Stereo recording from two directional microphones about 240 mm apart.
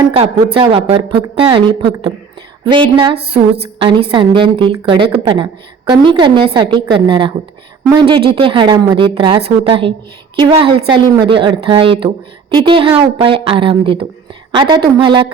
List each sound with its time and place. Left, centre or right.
0.5 s a woman's voice: right